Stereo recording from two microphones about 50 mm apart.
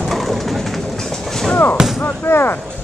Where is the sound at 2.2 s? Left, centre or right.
Left.